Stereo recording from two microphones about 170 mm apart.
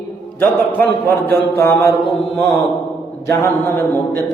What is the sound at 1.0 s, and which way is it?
Mantra, 15° left (ahead or behind).